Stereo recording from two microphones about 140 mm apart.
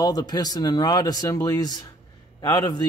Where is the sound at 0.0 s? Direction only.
30° left (ahead or behind).